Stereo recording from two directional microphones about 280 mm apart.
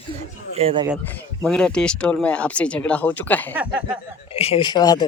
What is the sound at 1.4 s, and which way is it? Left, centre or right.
Speech, centre.